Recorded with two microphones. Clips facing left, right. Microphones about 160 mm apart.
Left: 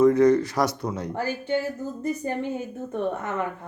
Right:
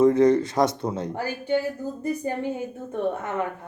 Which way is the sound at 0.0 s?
25° right (ahead or behind).